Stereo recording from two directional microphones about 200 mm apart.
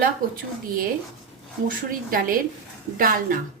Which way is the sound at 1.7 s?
45° right (ahead or behind).